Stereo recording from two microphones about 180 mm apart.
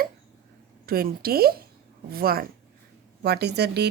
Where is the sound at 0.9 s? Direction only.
55° right (ahead or behind).